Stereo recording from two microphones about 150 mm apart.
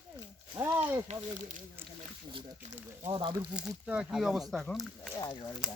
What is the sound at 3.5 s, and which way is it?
Speech, 5° right (ahead or behind).